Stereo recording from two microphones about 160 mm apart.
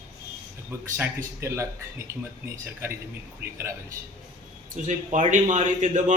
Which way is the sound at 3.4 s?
75° right (ahead or behind).